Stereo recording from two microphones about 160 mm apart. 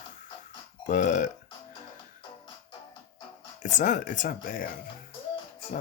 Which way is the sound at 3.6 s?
55° left (ahead or behind).